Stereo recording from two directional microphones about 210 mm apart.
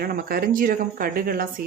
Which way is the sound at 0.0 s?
45° right (ahead or behind).